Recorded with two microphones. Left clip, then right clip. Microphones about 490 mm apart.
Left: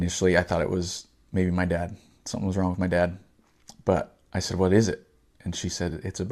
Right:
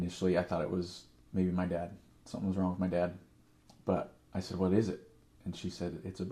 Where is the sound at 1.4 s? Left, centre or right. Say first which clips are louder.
Left 8 dB; left.